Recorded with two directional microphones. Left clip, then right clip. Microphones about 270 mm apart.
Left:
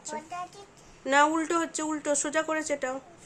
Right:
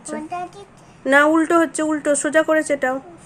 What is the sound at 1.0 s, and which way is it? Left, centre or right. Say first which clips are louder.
Speech: right 9 dB; centre.